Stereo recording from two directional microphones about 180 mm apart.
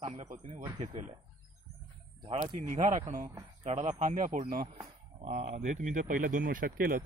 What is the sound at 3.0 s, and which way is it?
Speech, 40° right (ahead or behind).